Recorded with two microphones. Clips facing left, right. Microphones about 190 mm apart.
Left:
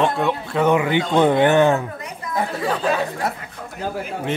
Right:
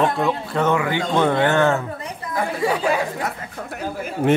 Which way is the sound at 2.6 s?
10° right (ahead or behind).